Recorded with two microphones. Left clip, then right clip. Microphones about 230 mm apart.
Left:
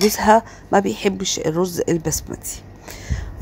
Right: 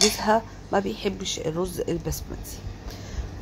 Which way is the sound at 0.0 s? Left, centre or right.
Left.